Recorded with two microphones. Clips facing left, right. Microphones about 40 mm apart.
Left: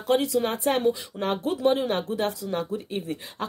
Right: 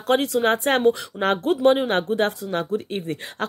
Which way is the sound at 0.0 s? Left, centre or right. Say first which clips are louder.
Right 3 dB; right.